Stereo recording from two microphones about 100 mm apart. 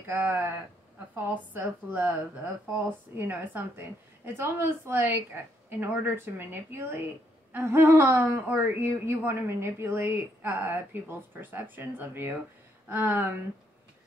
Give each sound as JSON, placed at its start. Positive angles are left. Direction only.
{"t": 0.0, "sound": "a woman's voice", "side_deg": -20}